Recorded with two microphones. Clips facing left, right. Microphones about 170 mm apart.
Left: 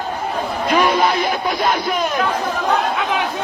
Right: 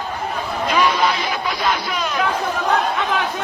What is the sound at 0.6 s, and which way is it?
Speech, 55° left (ahead or behind).